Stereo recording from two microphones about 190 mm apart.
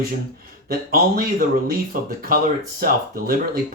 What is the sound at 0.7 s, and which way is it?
Speech, 50° right (ahead or behind).